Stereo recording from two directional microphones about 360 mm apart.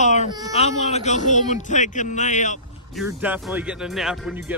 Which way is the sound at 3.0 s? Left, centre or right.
Centre.